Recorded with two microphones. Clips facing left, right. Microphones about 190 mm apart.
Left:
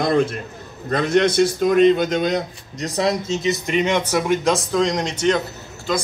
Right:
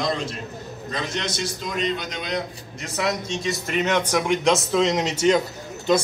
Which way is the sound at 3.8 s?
10° left (ahead or behind).